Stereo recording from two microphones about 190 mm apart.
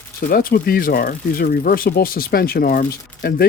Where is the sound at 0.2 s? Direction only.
50° left (ahead or behind).